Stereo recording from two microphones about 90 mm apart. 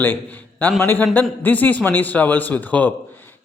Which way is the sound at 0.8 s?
25° left (ahead or behind).